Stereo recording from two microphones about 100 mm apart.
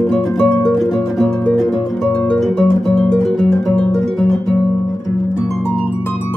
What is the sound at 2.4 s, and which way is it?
Music, centre (ahead or behind).